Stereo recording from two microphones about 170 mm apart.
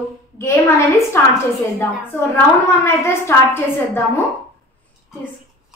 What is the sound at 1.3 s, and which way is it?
A woman's voice, 15° left (ahead or behind).